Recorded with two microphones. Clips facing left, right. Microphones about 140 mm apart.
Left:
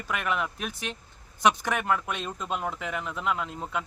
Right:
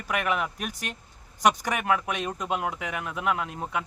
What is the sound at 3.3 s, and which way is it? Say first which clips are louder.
Speech: right 2 dB; 60° right (ahead or behind).